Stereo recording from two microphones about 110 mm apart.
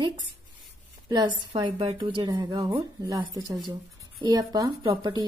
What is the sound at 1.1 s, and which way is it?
A woman's voice, 40° right (ahead or behind).